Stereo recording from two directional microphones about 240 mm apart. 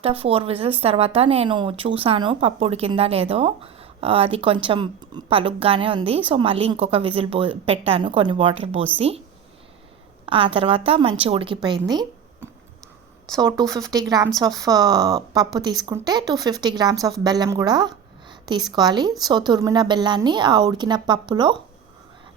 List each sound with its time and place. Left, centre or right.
0.0 s speech: right
10.2 s speech: right
11.9 s a sound: centre
13.3 s speech: centre